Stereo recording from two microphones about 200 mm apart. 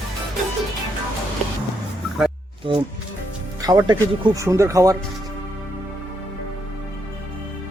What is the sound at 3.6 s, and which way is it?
Speech, 20° right (ahead or behind).